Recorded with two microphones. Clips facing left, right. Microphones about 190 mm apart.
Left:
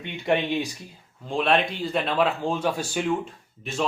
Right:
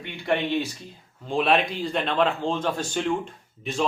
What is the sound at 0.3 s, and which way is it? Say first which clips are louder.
Speech: left 1 dB; 15° left (ahead or behind).